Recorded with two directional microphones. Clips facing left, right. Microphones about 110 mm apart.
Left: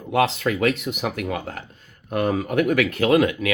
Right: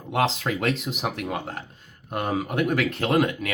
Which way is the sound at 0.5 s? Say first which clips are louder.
Left 4 dB; 35° right (ahead or behind).